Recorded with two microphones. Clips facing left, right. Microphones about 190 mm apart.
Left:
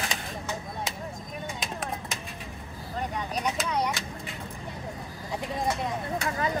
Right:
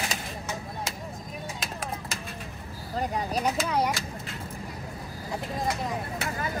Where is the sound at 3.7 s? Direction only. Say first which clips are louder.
Right 1 dB; 5° right (ahead or behind).